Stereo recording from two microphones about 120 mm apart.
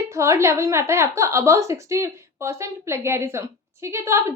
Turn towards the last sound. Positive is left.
turn(degrees=-20)  # may be behind; listen again after turning